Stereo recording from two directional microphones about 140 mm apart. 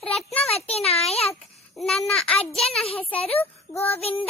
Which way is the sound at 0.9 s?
45° left (ahead or behind).